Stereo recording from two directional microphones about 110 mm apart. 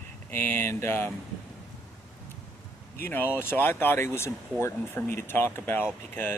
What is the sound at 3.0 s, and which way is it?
Speech, 20° left (ahead or behind).